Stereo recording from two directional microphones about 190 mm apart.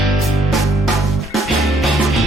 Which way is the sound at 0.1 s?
Centre (ahead or behind).